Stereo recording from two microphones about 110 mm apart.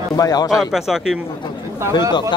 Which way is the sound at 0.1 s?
35° left (ahead or behind).